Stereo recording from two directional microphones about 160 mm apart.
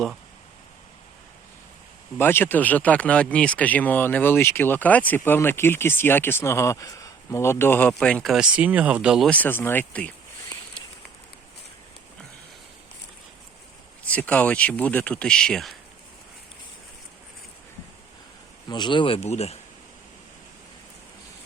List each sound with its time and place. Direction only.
2.1 s speech: 15° left (ahead or behind); by 9.3 s 5° right (ahead or behind)
9.3 s speech: 10° left (ahead or behind)
14.0 s speech: 10° left (ahead or behind)
18.7 s speech: 30° left (ahead or behind)